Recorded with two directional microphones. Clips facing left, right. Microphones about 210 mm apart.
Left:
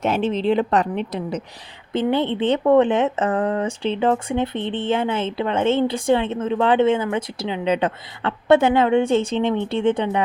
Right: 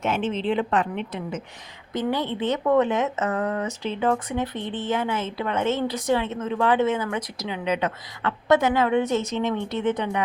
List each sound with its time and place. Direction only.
0.0 s a woman's voice: 35° left (ahead or behind)
1.9 s speech: 25° left (ahead or behind)